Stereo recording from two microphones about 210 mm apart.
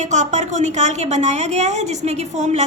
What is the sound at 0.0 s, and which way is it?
A woman's voice, 35° right (ahead or behind).